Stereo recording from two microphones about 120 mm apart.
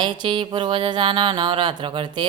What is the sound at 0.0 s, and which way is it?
Music, 45° right (ahead or behind).